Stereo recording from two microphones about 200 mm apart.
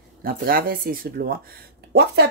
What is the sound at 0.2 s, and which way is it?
Speech, 45° right (ahead or behind).